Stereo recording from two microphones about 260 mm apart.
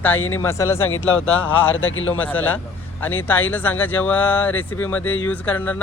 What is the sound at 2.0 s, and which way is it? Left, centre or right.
Speech, centre.